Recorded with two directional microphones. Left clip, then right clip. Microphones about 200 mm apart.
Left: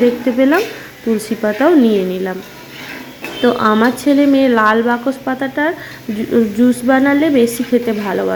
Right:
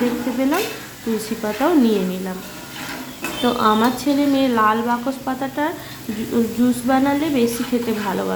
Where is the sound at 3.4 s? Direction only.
25° left (ahead or behind).